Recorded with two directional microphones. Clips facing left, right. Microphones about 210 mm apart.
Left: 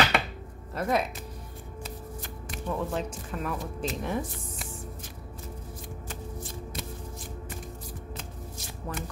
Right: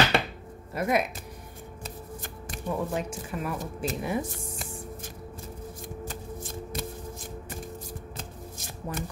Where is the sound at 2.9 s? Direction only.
10° right (ahead or behind).